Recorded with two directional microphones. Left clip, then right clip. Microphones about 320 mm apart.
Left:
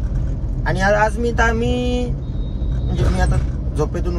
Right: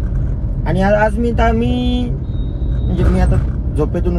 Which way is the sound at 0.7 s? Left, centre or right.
Left.